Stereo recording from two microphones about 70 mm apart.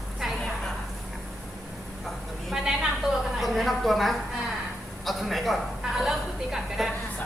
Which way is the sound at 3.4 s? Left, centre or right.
Centre.